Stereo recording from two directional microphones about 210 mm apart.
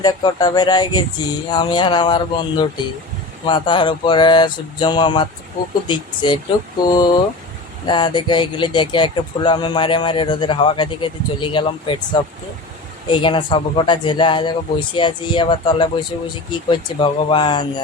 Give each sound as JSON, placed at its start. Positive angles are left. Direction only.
{"t": 0.0, "sound": "speech", "side_deg": 20}
{"t": 13.1, "sound": "speech", "side_deg": 25}